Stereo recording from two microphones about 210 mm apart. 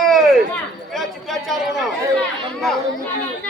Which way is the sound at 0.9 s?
Centre (ahead or behind).